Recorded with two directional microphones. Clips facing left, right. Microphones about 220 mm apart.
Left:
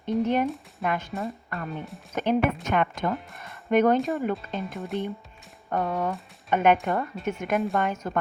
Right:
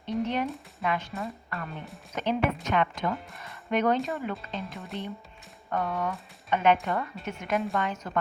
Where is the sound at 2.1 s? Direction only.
50° left (ahead or behind).